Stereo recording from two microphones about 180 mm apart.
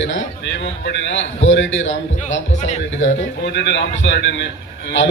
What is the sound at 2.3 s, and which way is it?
Speech, 40° left (ahead or behind).